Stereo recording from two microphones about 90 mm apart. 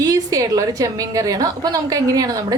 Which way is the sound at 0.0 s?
40° right (ahead or behind).